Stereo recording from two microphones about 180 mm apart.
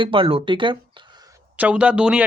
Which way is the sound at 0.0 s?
30° right (ahead or behind).